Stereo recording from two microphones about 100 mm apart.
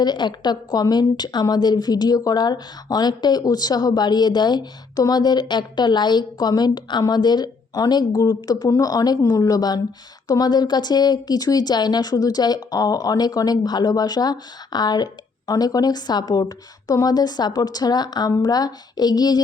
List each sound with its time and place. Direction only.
0.0 s a woman's voice: 45° left (ahead or behind)